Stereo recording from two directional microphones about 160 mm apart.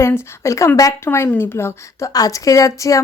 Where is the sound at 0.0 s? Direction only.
15° left (ahead or behind).